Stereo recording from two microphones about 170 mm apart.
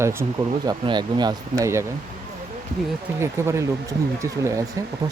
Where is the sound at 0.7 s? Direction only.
25° right (ahead or behind).